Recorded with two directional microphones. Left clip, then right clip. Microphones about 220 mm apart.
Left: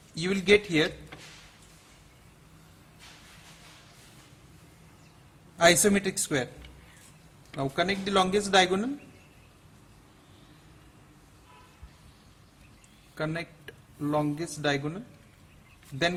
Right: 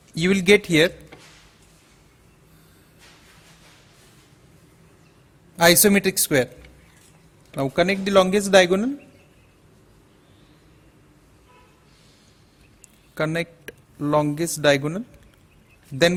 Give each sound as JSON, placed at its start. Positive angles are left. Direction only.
{"t": 0.1, "sound": "speech", "side_deg": -40}
{"t": 5.5, "sound": "speech", "side_deg": -40}
{"t": 7.5, "sound": "speech", "side_deg": -40}
{"t": 13.1, "sound": "speech", "side_deg": -40}